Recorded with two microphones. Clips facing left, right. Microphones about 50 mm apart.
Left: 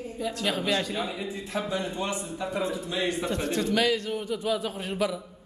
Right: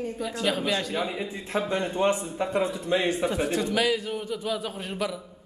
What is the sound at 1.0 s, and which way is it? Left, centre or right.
Speech, centre.